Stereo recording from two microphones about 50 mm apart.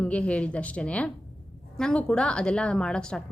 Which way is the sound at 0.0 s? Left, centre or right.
Left.